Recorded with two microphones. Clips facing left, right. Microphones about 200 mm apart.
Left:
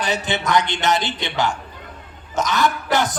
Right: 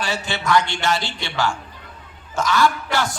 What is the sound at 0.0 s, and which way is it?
A man's voice, 20° left (ahead or behind).